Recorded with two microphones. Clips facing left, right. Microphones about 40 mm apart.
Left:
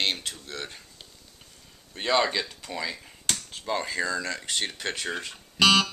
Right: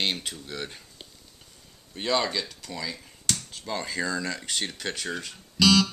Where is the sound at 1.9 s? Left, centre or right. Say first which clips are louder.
Left 2 dB; centre.